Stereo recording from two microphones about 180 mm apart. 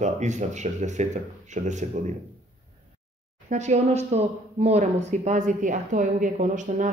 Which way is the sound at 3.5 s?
40° right (ahead or behind).